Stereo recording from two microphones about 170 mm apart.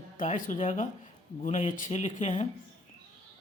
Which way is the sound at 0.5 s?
45° left (ahead or behind).